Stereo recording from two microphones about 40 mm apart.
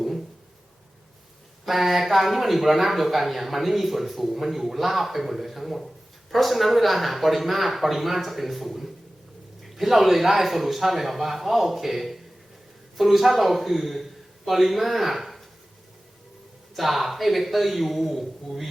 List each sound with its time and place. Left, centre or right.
1.6 s a man's voice: centre
16.7 s speech: centre